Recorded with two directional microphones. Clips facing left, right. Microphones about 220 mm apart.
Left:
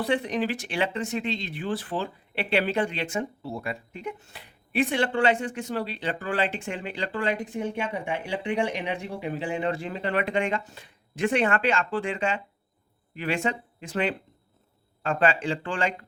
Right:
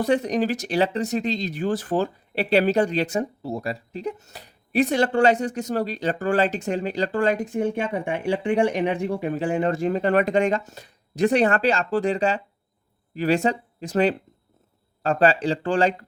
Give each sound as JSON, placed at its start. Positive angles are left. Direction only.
{"t": 0.0, "sound": "speech", "side_deg": -40}